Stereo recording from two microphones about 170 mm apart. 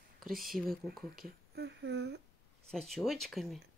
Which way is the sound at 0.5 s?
60° right (ahead or behind).